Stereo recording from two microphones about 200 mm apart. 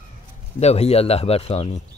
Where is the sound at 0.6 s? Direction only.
30° left (ahead or behind).